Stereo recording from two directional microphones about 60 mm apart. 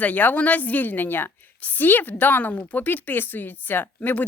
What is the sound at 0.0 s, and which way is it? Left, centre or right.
A woman's voice, left.